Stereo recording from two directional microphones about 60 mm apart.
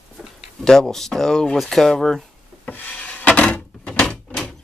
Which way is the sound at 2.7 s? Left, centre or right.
Left.